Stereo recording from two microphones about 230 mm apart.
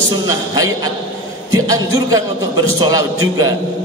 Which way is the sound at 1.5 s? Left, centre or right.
Centre.